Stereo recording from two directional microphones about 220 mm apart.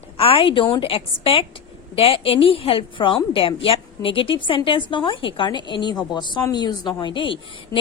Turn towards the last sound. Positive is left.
turn(degrees=25)  # may be behind; listen again after turning